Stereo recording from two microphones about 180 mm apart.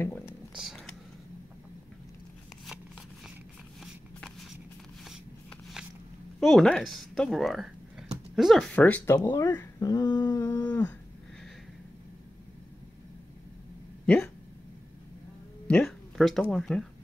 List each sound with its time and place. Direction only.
0.0 s a sound: 15° left (ahead or behind)
3.8 s walk: centre (ahead or behind)
6.4 s speech: centre (ahead or behind); by 10.7 s 20° left (ahead or behind)
10.7 s speech: 10° left (ahead or behind)
14.0 s speech: 10° left (ahead or behind)
15.6 s speech: 5° left (ahead or behind)